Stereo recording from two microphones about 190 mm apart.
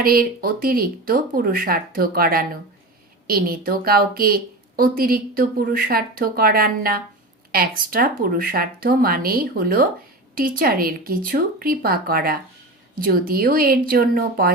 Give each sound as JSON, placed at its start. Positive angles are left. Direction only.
{"t": 0.0, "sound": "speech", "side_deg": -50}